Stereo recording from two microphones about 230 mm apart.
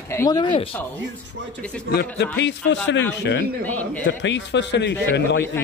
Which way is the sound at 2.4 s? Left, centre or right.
Left.